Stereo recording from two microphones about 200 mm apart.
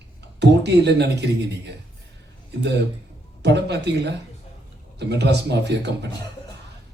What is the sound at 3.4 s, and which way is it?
Speech, 60° right (ahead or behind).